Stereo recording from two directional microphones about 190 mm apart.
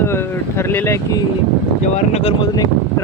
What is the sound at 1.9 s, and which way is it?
Speech, 35° left (ahead or behind).